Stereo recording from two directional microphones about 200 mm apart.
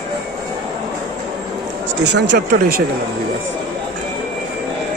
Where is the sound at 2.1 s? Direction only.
50° right (ahead or behind).